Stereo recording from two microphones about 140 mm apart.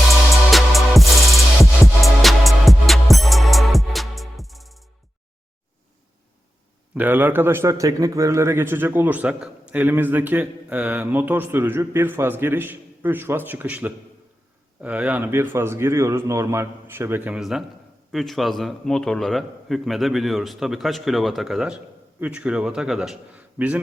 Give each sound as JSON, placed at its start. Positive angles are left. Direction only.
{"t": 0.5, "sound": "music", "side_deg": 0}
{"t": 6.9, "sound": "a man's voice", "side_deg": -10}